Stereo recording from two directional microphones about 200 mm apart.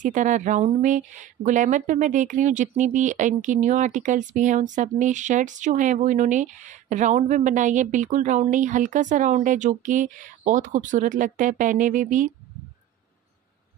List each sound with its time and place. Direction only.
0.0 s speech: 40° right (ahead or behind)